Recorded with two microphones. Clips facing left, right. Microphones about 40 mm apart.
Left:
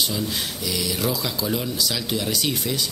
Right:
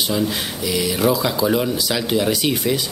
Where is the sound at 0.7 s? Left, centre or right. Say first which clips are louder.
Right 8 dB; centre.